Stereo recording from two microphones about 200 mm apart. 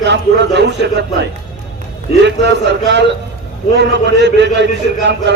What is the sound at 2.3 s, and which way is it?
A man's voice, 60° right (ahead or behind).